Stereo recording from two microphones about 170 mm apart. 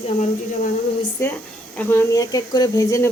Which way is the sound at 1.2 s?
15° left (ahead or behind).